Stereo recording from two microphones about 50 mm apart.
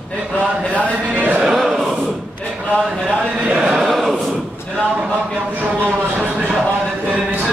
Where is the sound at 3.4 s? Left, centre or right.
Right.